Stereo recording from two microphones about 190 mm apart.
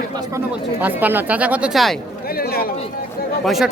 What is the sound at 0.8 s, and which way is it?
Speech, 10° right (ahead or behind).